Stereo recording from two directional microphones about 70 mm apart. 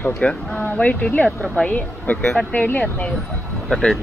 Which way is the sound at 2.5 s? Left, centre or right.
Left.